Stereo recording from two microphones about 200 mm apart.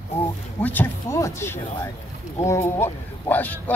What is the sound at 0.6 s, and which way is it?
A man's voice, 10° left (ahead or behind).